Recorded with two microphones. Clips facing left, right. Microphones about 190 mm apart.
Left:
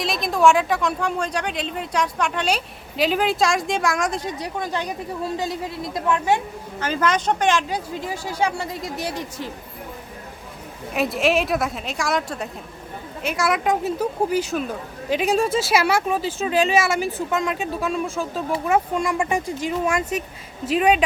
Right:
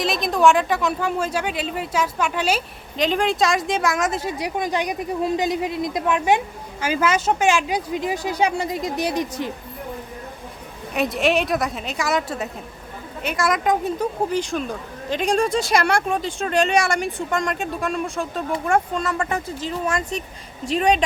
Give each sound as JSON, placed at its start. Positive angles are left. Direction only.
{"t": 0.0, "sound": "a woman's voice", "side_deg": 0}
{"t": 10.9, "sound": "speech", "side_deg": 0}